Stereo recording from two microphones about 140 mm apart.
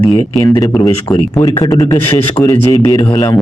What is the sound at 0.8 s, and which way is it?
Speech, 25° left (ahead or behind).